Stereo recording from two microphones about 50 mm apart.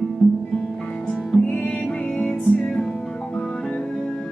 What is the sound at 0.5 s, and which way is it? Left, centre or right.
Music, centre.